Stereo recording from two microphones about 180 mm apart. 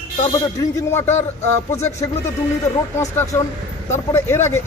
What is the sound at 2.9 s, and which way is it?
Speech, 15° left (ahead or behind).